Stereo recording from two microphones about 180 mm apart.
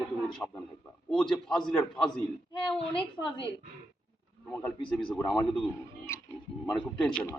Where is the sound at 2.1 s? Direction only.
25° left (ahead or behind).